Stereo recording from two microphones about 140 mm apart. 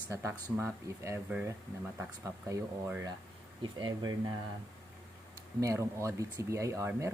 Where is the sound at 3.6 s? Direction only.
30° right (ahead or behind).